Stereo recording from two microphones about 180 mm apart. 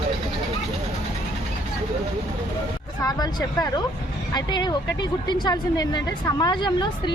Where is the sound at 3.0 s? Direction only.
20° left (ahead or behind).